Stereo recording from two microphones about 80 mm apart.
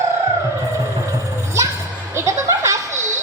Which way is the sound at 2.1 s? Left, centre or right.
Right.